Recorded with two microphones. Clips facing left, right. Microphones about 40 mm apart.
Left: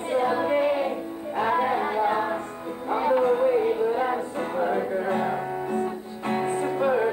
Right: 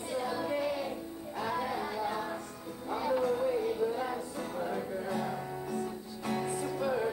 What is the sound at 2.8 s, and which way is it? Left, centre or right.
Music, left.